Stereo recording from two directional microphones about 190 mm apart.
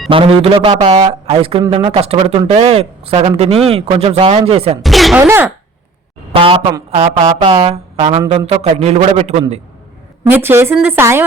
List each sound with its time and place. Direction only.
0.1 s a man's voice: 25° right (ahead or behind)
4.8 s speech: centre (ahead or behind)
6.3 s a man's voice: 25° right (ahead or behind)
10.2 s a woman's voice: 10° right (ahead or behind)